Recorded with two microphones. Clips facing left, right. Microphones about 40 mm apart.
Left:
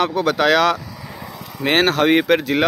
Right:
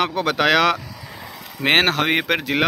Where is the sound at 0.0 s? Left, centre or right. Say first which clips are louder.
Left 2 dB; centre.